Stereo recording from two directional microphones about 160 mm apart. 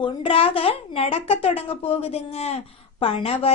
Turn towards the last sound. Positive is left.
turn(degrees=40)  # may be behind; listen again after turning